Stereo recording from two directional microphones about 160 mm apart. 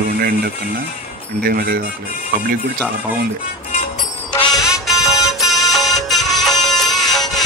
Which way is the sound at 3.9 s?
30° left (ahead or behind).